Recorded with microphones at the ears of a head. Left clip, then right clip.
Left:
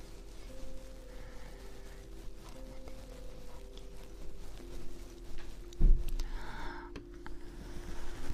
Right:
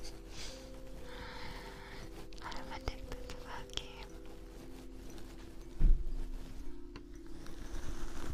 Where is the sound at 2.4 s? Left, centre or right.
Right.